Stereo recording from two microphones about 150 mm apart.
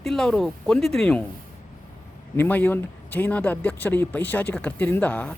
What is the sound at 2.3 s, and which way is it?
Speech, 10° left (ahead or behind).